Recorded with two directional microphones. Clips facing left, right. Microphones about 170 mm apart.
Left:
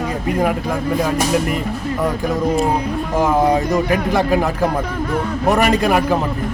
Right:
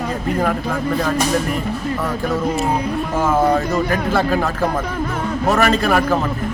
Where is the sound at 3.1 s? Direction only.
15° left (ahead or behind).